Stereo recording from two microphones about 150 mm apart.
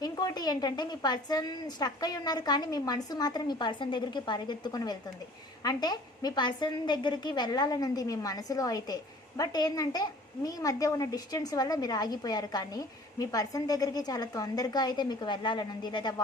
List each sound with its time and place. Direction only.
0.0 s a child's voice: 25° left (ahead or behind)